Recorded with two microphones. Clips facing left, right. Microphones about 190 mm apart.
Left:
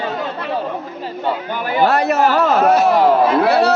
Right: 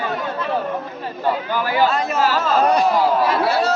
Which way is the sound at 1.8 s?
65° left (ahead or behind).